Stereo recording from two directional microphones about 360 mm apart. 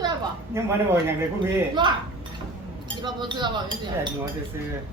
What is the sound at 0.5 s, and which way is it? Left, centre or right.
Speech, centre.